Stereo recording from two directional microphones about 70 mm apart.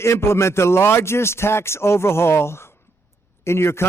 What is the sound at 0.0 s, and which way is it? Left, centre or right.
A man's voice, left.